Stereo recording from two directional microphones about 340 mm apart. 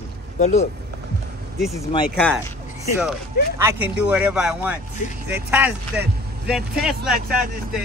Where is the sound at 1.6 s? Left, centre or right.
Centre.